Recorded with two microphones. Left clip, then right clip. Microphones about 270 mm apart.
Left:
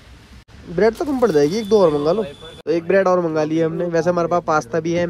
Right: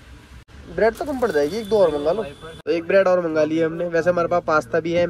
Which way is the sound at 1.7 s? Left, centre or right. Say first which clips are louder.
Left 2 dB; left.